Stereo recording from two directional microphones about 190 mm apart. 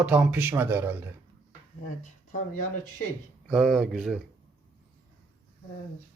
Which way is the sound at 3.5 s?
5° right (ahead or behind).